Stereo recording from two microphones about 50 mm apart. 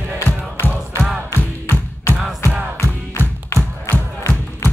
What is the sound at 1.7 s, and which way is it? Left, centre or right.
Music, left.